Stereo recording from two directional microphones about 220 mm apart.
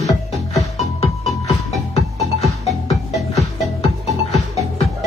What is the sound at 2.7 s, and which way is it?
Music, centre (ahead or behind).